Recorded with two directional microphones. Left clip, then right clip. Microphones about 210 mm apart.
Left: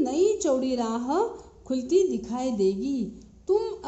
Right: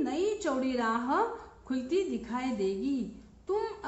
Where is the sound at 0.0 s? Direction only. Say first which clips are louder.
Left 7 dB; 50° left (ahead or behind).